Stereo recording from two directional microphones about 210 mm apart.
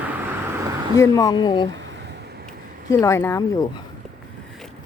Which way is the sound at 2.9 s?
15° left (ahead or behind).